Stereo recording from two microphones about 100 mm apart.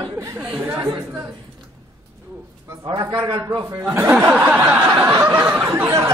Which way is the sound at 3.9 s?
20° right (ahead or behind).